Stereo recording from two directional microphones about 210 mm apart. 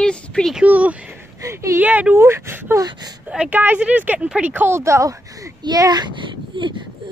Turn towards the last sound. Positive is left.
turn(degrees=-20)  # may be behind; listen again after turning